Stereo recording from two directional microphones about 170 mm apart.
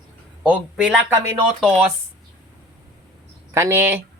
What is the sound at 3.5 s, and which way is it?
Speech, 15° right (ahead or behind).